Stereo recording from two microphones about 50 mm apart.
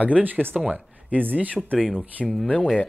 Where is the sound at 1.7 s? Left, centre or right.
Centre.